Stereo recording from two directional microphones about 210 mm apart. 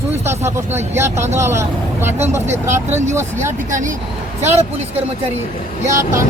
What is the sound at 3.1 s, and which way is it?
Speech, 10° right (ahead or behind).